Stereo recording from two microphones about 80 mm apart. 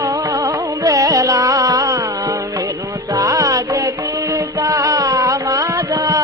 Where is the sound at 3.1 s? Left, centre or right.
Right.